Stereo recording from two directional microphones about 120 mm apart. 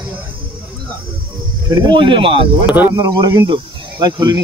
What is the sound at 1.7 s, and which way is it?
Speech, 40° right (ahead or behind).